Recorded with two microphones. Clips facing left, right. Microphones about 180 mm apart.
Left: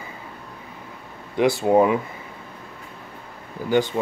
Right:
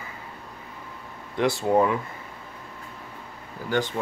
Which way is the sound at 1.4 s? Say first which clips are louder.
Left 4 dB; 5° left (ahead or behind).